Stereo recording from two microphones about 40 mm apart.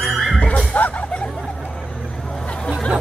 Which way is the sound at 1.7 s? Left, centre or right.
Centre.